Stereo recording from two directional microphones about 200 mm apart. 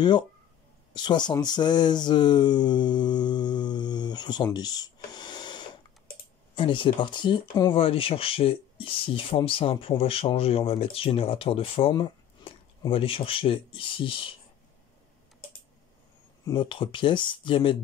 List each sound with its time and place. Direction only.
0.9 s speech: 20° left (ahead or behind)
16.4 s speech: 25° left (ahead or behind)